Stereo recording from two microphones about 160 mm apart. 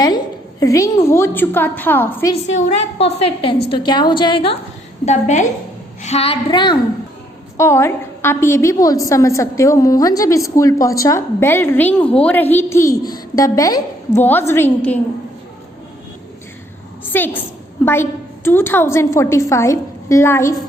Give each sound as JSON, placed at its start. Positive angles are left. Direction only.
{"t": 0.6, "sound": "a woman's voice", "side_deg": 20}
{"t": 2.3, "sound": "a woman's voice", "side_deg": 45}
{"t": 3.7, "sound": "a woman's voice", "side_deg": 25}
{"t": 5.0, "sound": "a woman's voice", "side_deg": 50}
{"t": 7.5, "sound": "a woman's voice", "side_deg": 15}
{"t": 17.1, "sound": "a woman's voice", "side_deg": 10}